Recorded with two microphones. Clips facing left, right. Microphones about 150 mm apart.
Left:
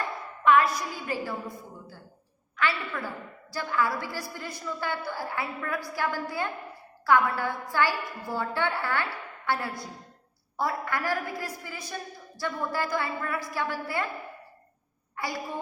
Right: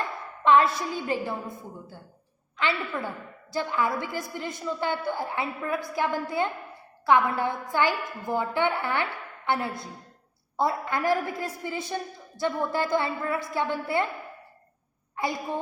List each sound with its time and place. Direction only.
0.4 s a woman's voice: 25° right (ahead or behind)
15.1 s a woman's voice: 20° right (ahead or behind)